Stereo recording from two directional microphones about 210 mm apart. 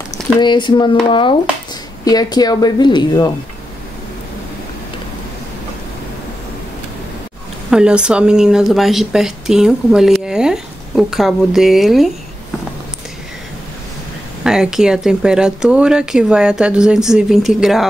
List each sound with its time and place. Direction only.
0.4 s speech: 20° left (ahead or behind)
2.0 s speech: 20° left (ahead or behind)
7.7 s speech: 5° right (ahead or behind)
14.4 s speech: 5° right (ahead or behind)